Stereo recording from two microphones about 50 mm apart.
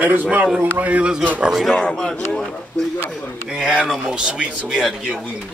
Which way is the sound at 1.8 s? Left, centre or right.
Centre.